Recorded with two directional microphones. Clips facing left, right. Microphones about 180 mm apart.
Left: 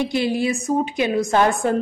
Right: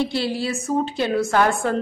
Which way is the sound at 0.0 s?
15° left (ahead or behind).